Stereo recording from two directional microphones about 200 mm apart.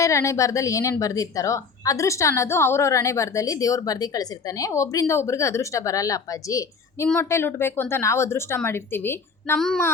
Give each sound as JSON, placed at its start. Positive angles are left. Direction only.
{"t": 0.0, "sound": "a woman's voice", "side_deg": 15}